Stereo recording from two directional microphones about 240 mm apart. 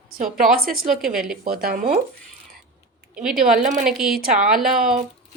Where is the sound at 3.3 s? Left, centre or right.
Right.